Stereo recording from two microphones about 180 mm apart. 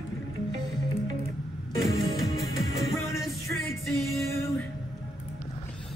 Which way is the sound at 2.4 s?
Centre (ahead or behind).